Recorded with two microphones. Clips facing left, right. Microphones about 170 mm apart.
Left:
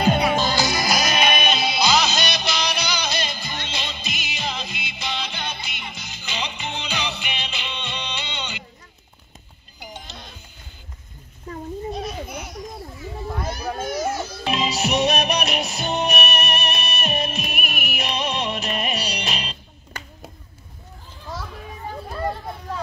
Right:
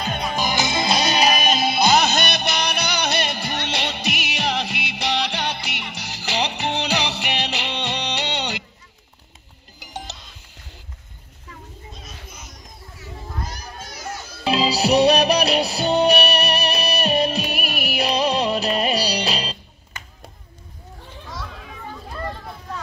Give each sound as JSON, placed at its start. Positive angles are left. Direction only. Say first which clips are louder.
{"t": 0.4, "sound": "music", "louder": "even", "side_deg": -20}
{"t": 9.8, "sound": "music", "louder": "right 3 dB", "side_deg": -85}
{"t": 11.9, "sound": "a sound", "louder": "left 13 dB", "side_deg": 70}
{"t": 13.4, "sound": "children playing", "louder": "left 8 dB", "side_deg": 70}
{"t": 14.4, "sound": "music", "louder": "right 5 dB", "side_deg": -35}